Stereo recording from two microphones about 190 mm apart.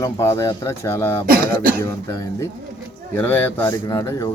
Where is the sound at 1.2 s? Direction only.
50° right (ahead or behind).